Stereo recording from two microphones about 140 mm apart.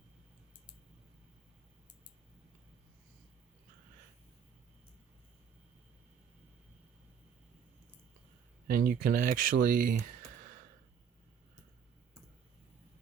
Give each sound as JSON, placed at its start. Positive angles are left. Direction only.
{"t": 8.7, "sound": "speech", "side_deg": -90}